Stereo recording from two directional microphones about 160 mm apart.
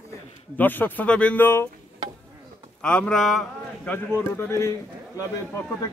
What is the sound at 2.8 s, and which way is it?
A man's voice, 5° left (ahead or behind).